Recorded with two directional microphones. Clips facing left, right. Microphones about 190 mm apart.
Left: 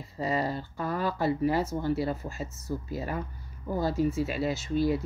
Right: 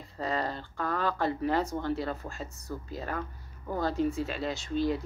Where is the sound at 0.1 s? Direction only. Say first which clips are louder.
Left 3 dB; 10° left (ahead or behind).